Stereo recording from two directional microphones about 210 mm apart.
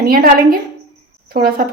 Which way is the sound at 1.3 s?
45° right (ahead or behind).